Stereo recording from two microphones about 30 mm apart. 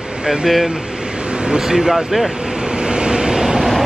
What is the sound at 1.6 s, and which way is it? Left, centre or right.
Speech, centre.